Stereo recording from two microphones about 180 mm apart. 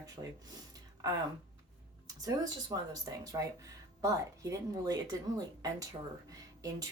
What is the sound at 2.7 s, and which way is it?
Speech, 20° right (ahead or behind).